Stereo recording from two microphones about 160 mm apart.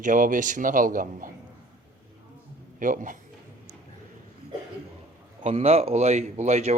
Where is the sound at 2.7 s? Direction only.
55° right (ahead or behind).